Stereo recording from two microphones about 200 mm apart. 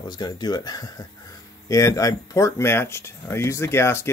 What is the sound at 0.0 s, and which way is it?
Speech, 20° left (ahead or behind).